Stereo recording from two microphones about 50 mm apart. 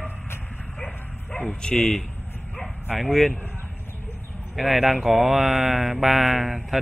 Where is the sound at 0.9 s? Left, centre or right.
Left.